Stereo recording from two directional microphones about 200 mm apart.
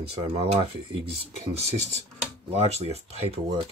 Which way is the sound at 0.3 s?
25° right (ahead or behind).